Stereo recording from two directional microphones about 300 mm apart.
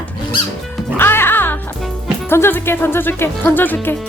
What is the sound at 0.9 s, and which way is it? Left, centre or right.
Music, centre.